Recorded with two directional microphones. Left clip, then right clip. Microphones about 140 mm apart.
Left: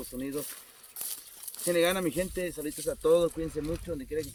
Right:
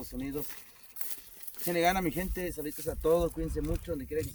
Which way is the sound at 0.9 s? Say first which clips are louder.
Left 6 dB; 90° right.